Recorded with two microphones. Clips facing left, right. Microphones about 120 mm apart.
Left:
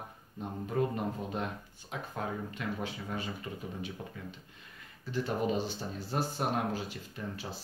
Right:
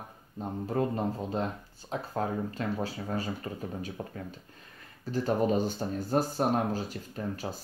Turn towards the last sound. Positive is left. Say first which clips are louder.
# right 5 dB
turn(degrees=-40)  # may be behind; listen again after turning